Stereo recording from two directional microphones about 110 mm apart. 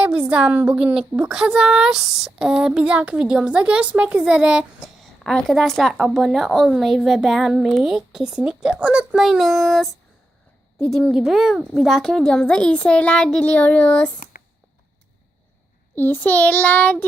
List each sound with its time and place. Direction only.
0.0 s a woman's voice: 10° right (ahead or behind); by 14.1 s 10° left (ahead or behind)
16.0 s child singing: 15° left (ahead or behind)